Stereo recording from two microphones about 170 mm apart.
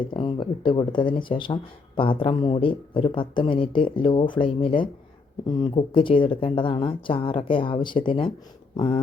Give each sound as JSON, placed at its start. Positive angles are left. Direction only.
{"t": 0.0, "sound": "speech", "side_deg": 30}